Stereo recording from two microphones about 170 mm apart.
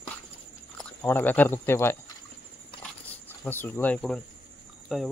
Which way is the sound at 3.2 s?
10° left (ahead or behind).